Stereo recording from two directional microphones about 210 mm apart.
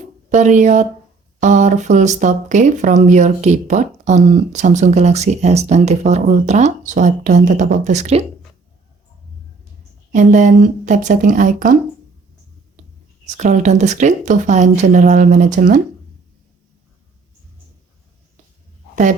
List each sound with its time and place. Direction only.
0.3 s speech: 35° right (ahead or behind)
10.1 s speech: 35° right (ahead or behind)
13.2 s speech: 35° right (ahead or behind)